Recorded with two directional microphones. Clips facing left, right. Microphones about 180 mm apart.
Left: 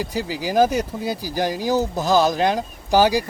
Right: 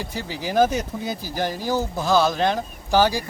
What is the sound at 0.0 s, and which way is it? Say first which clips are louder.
Speech: left 4 dB; 10° left (ahead or behind).